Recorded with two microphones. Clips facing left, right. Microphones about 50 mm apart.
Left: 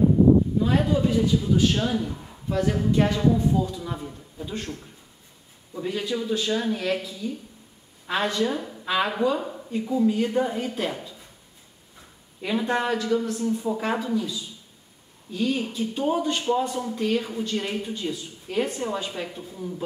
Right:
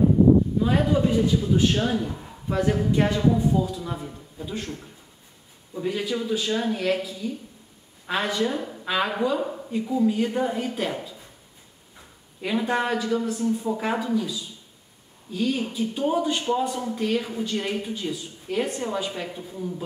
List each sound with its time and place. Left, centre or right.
0.6 s a man's voice: centre
5.8 s a woman's voice: centre
12.4 s a woman's voice: centre
15.3 s a woman's voice: centre